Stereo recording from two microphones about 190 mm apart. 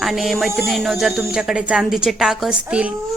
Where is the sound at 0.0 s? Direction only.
Centre (ahead or behind).